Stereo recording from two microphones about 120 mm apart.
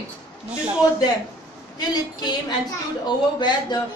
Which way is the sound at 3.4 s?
40° left (ahead or behind).